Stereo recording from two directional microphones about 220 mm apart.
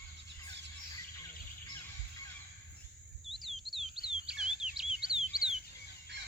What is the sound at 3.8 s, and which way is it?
Chirp, 25° right (ahead or behind).